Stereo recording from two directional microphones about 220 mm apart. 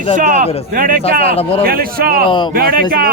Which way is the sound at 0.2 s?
35° right (ahead or behind).